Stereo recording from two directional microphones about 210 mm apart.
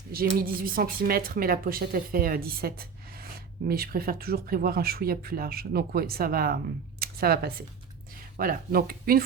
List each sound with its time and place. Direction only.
0.1 s a woman's voice: 45° right (ahead or behind)
7.0 s a sound: 45° right (ahead or behind)
8.1 s speech: 45° right (ahead or behind)